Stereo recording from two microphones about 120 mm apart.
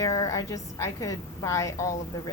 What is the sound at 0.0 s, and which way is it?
A woman's voice, 30° left (ahead or behind).